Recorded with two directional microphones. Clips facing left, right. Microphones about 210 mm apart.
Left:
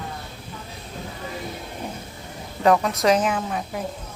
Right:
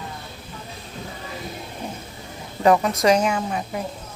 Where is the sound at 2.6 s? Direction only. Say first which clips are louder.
Right 1 dB; centre (ahead or behind).